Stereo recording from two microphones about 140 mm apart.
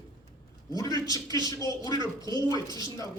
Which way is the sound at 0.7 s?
25° left (ahead or behind).